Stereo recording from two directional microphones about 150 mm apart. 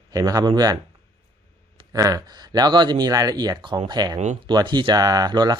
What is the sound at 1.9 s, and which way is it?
Speech, 25° right (ahead or behind).